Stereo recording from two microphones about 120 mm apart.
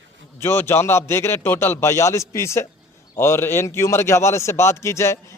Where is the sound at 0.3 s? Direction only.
20° left (ahead or behind).